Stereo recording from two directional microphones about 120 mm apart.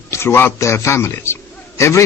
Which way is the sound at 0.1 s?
20° left (ahead or behind).